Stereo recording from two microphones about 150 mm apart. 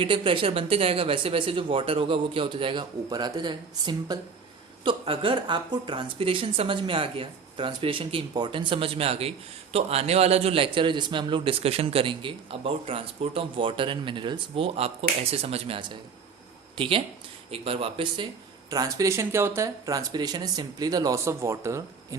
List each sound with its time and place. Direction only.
0.0 s a man's voice: 35° right (ahead or behind)
18.7 s speech: 25° right (ahead or behind)